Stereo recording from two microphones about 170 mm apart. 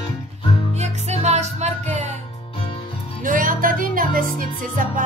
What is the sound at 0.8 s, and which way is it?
Music, 40° right (ahead or behind).